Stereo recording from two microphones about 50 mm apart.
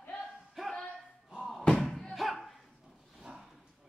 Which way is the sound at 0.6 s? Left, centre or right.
Centre.